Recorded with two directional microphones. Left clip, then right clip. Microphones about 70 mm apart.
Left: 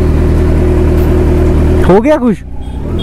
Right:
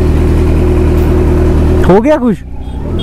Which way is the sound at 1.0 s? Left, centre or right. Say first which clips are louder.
Even; left.